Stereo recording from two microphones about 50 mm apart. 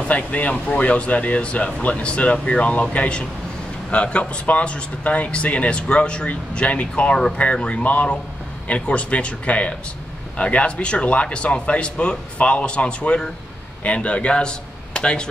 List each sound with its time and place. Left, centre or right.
0.1 s a man's voice: left